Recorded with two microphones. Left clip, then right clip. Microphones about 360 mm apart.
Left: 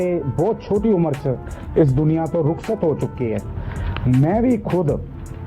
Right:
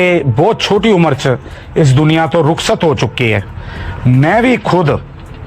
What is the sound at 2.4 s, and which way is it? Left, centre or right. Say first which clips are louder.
Speech: right 9 dB; right.